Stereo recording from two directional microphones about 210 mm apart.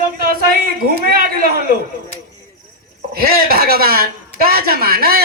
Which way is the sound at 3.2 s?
45° right (ahead or behind).